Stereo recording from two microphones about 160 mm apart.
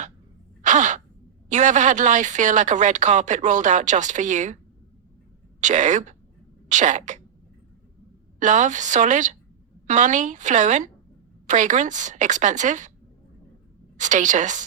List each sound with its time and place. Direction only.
0.6 s a sound: 50° right (ahead or behind)
1.5 s speech: 50° right (ahead or behind)
5.5 s speech: 50° right (ahead or behind)
8.4 s speech: 50° right (ahead or behind)
13.9 s speech: 50° right (ahead or behind)